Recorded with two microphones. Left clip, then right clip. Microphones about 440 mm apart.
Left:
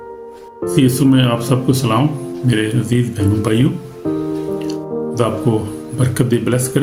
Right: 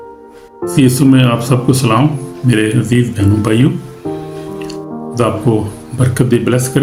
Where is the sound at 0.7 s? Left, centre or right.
Left.